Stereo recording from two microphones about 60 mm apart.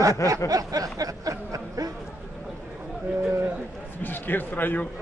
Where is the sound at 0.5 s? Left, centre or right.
Right.